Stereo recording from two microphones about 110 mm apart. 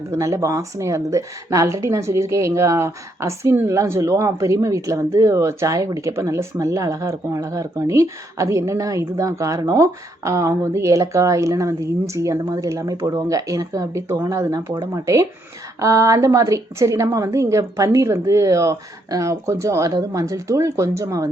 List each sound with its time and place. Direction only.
0.1 s speech: 30° right (ahead or behind)